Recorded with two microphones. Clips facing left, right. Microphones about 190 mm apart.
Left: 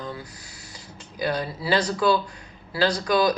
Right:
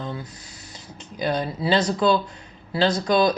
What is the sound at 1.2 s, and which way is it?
Speech, 20° right (ahead or behind).